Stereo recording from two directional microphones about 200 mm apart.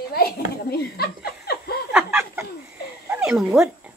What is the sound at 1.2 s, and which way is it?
Chuckle, 50° left (ahead or behind).